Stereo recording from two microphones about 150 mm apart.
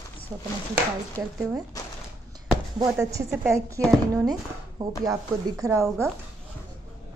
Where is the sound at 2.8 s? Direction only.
20° right (ahead or behind).